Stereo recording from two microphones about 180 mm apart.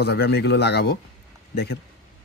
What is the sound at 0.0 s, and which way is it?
Speech, 65° left (ahead or behind).